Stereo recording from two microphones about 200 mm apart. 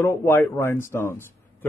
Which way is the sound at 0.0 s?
10° left (ahead or behind).